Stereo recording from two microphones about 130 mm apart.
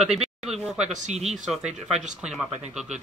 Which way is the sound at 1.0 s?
60° right (ahead or behind).